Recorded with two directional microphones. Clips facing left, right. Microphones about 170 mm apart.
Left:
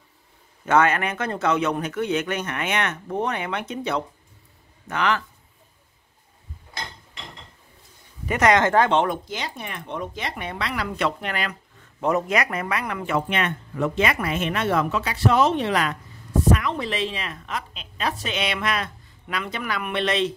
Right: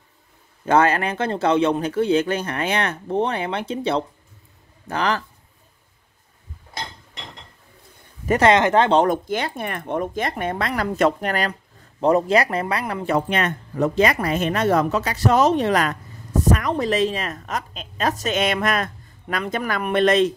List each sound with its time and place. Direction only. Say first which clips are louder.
0.7 s speech: right 2 dB; 30° right (ahead or behind)
8.3 s speech: right 3 dB; 30° right (ahead or behind)
8.9 s a woman's voice: right 4 dB; 45° right (ahead or behind)